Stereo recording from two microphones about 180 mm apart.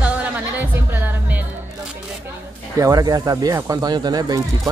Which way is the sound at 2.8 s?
20° right (ahead or behind).